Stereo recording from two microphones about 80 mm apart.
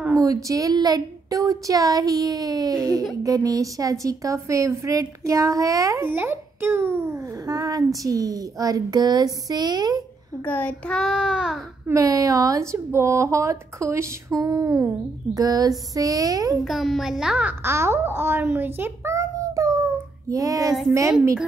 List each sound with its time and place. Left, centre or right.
0.1 s a woman's voice: right
6.0 s a child's voice: right
7.4 s a woman's voice: right
10.4 s a child's voice: left
10.9 s a child's voice: centre
11.9 s a woman's voice: right
16.6 s a child's voice: centre
17.5 s a child's voice: right
19.1 s child singing: right